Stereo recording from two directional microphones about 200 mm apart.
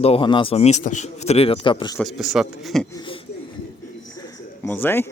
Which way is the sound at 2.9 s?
25° left (ahead or behind).